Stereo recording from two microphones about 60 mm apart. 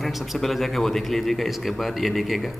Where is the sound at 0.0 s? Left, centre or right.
Centre.